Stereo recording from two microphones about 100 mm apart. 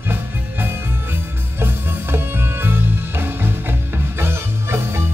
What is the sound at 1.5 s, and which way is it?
Music, 25° right (ahead or behind).